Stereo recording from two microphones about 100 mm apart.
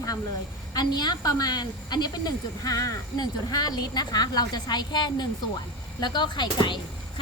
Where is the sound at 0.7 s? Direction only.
45° left (ahead or behind).